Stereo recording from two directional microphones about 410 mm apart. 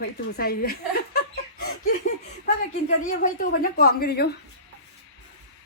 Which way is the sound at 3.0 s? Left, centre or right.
Centre.